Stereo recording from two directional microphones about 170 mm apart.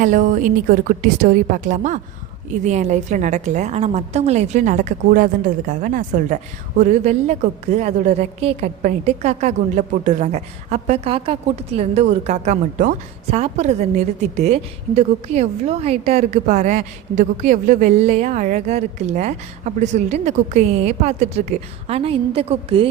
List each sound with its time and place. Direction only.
0.0 s a woman's voice: 50° right (ahead or behind); by 22.9 s 35° right (ahead or behind)